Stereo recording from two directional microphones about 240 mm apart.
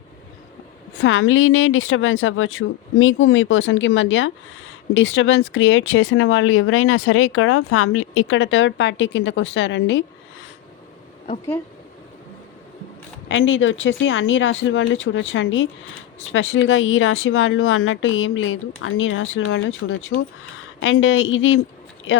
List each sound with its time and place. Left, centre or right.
0.9 s speech: left
13.2 s speech: left